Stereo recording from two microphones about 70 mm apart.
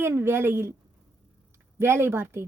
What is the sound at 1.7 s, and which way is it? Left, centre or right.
Speech, right.